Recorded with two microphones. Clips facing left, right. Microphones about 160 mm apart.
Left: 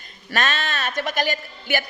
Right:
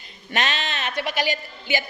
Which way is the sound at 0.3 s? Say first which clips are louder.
Left 2 dB; 20° right (ahead or behind).